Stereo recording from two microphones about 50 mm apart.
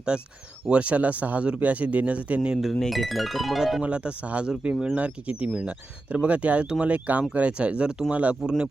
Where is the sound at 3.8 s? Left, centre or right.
Right.